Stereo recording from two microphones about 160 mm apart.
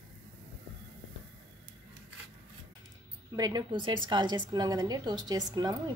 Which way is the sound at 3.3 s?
25° right (ahead or behind).